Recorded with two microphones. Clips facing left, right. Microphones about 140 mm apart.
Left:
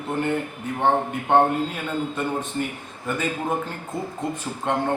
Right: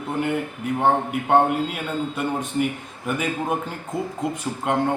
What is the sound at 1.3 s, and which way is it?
A man's voice, 10° right (ahead or behind).